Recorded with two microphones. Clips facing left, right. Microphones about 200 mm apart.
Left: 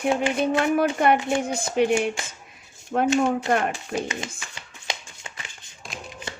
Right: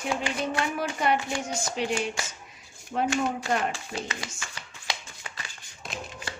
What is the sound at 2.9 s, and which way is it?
Speech, 55° left (ahead or behind).